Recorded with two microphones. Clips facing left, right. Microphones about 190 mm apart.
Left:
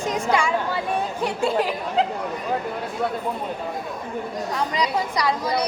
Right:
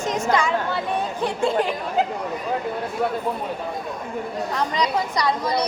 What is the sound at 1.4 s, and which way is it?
Speech, 10° left (ahead or behind).